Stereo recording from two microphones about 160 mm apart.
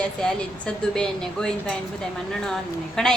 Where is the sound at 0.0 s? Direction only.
5° left (ahead or behind).